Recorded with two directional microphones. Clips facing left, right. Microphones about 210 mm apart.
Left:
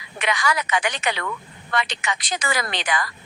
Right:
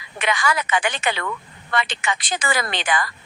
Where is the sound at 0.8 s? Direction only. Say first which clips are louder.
Right 1 dB; 30° right (ahead or behind).